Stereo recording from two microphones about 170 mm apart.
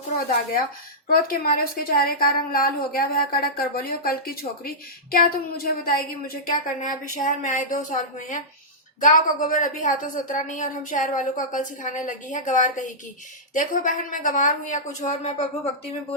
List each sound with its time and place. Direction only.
1.0 s a woman's voice: 60° left (ahead or behind); by 15.7 s 40° left (ahead or behind)